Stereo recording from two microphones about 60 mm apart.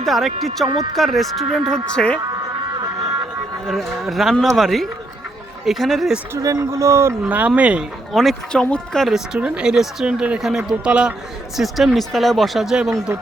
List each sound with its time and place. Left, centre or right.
0.0 s speech: centre
2.0 s speech: centre
4.0 s speech: centre
6.4 s speech: right
6.7 s a man's voice: right
7.3 s speech: right
8.1 s speech: centre
9.0 s speech: centre
11.5 s speech: centre